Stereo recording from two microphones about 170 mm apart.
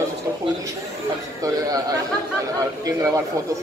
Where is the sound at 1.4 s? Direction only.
20° right (ahead or behind).